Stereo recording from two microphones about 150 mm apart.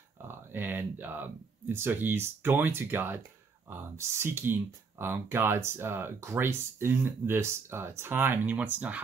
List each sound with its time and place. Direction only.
0.2 s speech: 15° right (ahead or behind)